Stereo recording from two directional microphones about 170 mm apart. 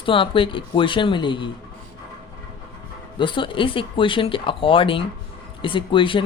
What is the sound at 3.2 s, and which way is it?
Speech, 30° left (ahead or behind).